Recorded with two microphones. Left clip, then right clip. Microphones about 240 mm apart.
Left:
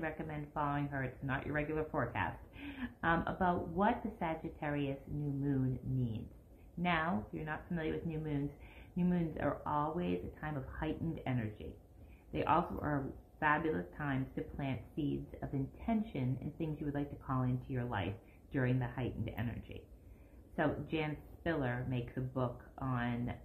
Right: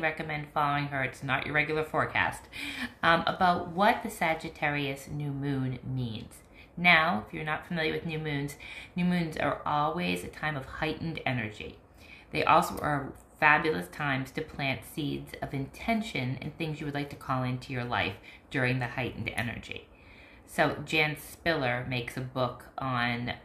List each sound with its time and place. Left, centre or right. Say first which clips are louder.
0.0 s speech: right 10 dB; right
6.8 s speech: right 13 dB; right